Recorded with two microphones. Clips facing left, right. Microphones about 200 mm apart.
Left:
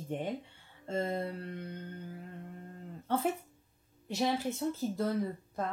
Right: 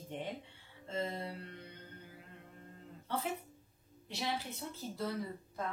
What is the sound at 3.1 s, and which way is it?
Speech, 50° left (ahead or behind).